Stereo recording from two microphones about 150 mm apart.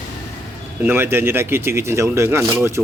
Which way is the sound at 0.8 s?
15° right (ahead or behind).